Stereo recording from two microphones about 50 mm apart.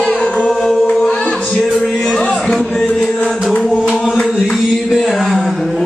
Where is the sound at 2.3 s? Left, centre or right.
Centre.